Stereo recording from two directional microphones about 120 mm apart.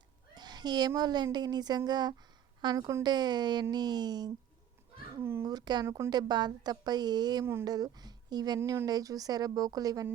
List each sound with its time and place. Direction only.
0.3 s speech: 35° right (ahead or behind)
5.2 s speech: 20° right (ahead or behind)
5.5 s speech: 35° right (ahead or behind)